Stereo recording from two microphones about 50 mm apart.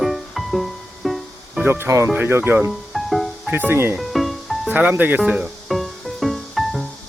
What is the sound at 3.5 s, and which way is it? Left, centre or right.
Speech, right.